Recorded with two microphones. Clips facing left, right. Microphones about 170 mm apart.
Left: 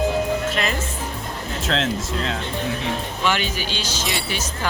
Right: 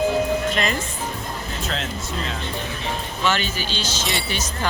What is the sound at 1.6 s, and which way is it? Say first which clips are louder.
Speech: left 8 dB; 90° left.